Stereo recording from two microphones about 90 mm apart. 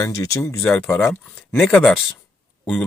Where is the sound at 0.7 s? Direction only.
25° left (ahead or behind).